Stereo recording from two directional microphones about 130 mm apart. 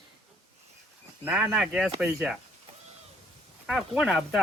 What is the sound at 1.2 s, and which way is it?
Speech, 10° right (ahead or behind).